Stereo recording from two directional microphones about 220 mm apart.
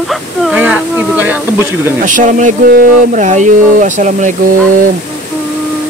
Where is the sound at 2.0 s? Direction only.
35° right (ahead or behind).